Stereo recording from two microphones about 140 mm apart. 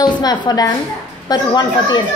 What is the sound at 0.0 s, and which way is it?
A woman's voice, 30° left (ahead or behind).